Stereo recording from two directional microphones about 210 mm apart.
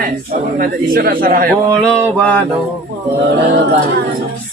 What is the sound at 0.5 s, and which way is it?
Speech, 45° right (ahead or behind).